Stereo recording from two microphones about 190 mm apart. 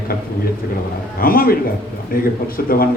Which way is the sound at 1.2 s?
50° left (ahead or behind).